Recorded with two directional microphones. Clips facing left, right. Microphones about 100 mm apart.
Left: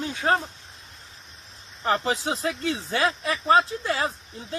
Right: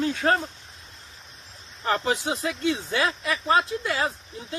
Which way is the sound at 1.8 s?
30° left (ahead or behind).